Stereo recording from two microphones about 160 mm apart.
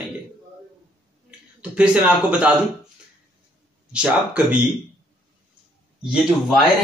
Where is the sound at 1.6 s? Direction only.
5° right (ahead or behind).